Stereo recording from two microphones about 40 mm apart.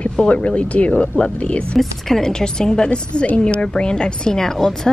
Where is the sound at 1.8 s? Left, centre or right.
Centre.